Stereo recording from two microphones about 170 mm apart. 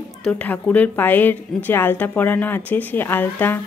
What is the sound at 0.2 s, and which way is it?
Speech, 10° left (ahead or behind).